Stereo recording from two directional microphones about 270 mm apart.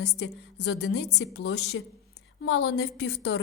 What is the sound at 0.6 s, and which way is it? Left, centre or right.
A woman's voice, left.